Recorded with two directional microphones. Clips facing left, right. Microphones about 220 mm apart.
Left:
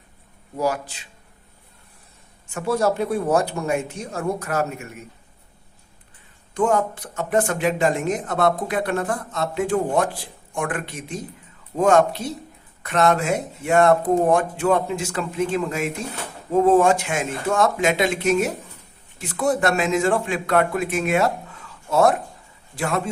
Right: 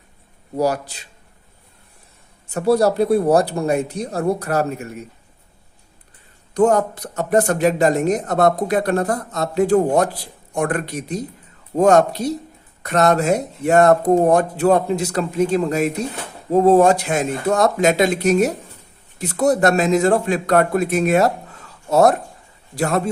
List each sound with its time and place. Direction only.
0.5 s speech: 40° right (ahead or behind)
2.5 s speech: 35° right (ahead or behind)
6.5 s speech: 40° right (ahead or behind)